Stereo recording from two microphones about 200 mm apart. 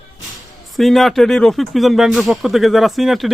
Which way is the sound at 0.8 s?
Centre (ahead or behind).